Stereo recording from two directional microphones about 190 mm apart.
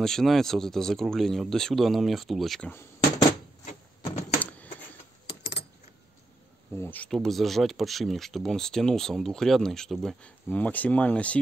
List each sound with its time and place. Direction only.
0.0 s speech: centre (ahead or behind)
3.6 s a sound: 30° left (ahead or behind)
4.2 s keys jangling: 10° left (ahead or behind)
6.8 s speech: 10° left (ahead or behind)